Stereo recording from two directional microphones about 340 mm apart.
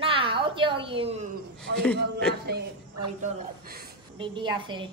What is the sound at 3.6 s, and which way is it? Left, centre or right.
Speech, right.